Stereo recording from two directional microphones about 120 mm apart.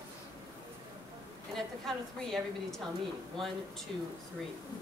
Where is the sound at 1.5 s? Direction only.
5° left (ahead or behind).